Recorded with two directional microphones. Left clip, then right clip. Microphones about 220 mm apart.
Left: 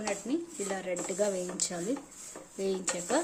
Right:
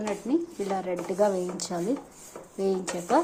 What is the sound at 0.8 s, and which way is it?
Speech, 15° left (ahead or behind).